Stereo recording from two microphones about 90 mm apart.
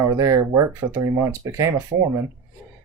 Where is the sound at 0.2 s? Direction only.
35° right (ahead or behind).